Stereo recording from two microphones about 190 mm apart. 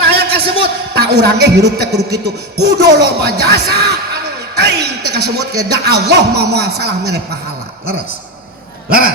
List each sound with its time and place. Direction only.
0.0 s a man's voice: 60° right (ahead or behind)